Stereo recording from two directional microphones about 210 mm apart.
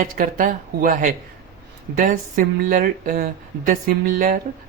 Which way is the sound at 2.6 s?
40° right (ahead or behind).